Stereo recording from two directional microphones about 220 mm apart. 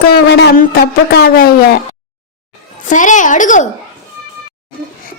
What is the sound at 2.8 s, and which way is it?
Speech, 35° left (ahead or behind).